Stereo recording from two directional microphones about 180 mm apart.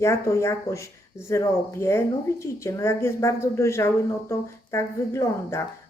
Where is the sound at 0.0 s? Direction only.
15° left (ahead or behind).